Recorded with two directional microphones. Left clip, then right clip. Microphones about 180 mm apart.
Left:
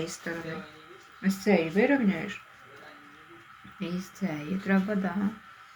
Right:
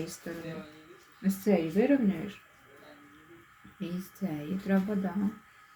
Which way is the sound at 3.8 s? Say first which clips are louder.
Left 3 dB; 15° right (ahead or behind).